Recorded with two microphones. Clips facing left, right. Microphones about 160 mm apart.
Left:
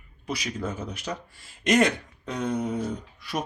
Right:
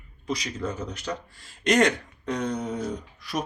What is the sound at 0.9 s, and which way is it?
A man's voice, 10° left (ahead or behind).